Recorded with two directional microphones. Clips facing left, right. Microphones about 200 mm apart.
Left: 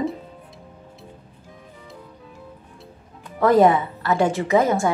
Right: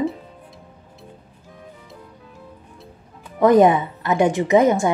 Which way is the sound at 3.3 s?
20° right (ahead or behind).